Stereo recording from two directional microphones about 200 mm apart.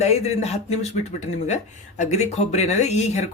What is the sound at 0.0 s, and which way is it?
Speech, 35° left (ahead or behind).